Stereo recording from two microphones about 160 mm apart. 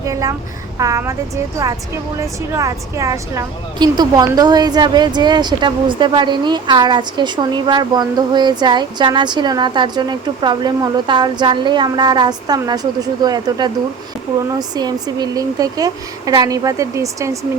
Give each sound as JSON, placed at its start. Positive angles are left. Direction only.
{"t": 0.0, "sound": "speech", "side_deg": -20}
{"t": 14.8, "sound": "speech", "side_deg": -25}